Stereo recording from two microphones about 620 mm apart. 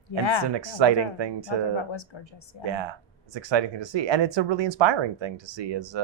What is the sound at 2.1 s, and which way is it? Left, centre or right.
Speech, left.